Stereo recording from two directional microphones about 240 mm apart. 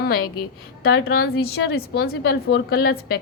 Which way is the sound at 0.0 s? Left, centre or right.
Left.